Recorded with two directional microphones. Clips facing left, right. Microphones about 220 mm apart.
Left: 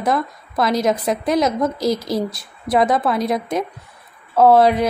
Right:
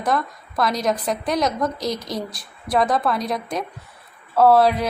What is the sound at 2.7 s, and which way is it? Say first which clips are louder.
Speech: left 3 dB; 20° left (ahead or behind).